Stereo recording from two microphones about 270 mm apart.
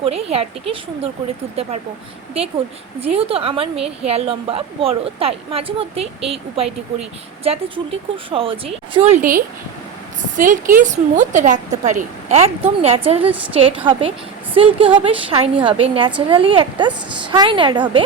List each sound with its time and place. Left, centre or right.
0.0 s a woman's voice: right
3.0 s a woman's voice: right